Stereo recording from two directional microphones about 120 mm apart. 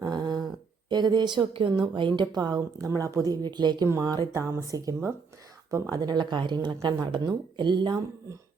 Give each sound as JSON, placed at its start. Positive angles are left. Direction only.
{"t": 0.0, "sound": "humming", "side_deg": -35}
{"t": 0.9, "sound": "a woman's voice", "side_deg": -35}
{"t": 3.8, "sound": "a woman's voice", "side_deg": -25}